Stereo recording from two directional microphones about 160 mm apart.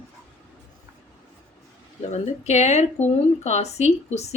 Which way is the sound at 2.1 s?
45° left (ahead or behind).